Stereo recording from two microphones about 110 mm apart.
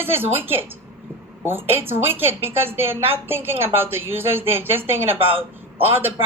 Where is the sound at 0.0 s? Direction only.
20° right (ahead or behind).